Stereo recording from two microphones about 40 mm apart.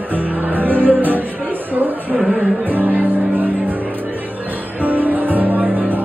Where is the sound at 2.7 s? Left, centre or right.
Right.